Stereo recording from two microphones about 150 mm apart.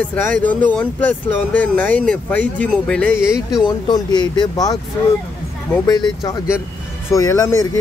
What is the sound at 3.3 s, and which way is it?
Speech, 5° right (ahead or behind).